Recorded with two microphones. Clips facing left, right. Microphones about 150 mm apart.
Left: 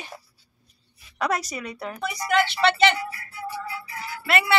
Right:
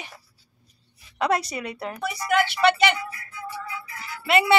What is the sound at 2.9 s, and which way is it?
Music, 35° left (ahead or behind).